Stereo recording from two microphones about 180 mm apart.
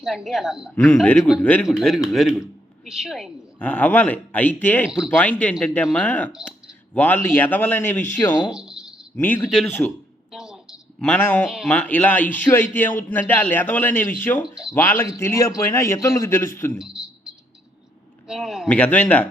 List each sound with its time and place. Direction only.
0.0 s a woman's voice: centre (ahead or behind)
4.9 s a woman's voice: 5° right (ahead or behind)
5.1 s a man's voice: 10° left (ahead or behind)
8.5 s a sound: 5° right (ahead or behind)
9.1 s a man's voice: 10° left (ahead or behind)
10.3 s a sound: 5° right (ahead or behind)
11.4 s a man's voice: centre (ahead or behind)
16.7 s a sound: 5° right (ahead or behind)
18.3 s a woman's voice: centre (ahead or behind)
18.8 s a man's voice: 10° left (ahead or behind)